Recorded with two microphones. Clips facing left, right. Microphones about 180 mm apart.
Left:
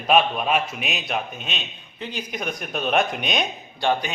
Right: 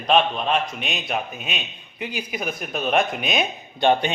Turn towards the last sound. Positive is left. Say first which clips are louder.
# right 4 dB
turn(degrees=-20)  # may be behind; listen again after turning